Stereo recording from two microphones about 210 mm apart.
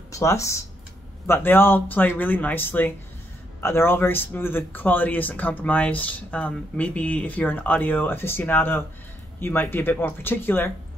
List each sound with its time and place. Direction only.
0.1 s speech: 15° left (ahead or behind)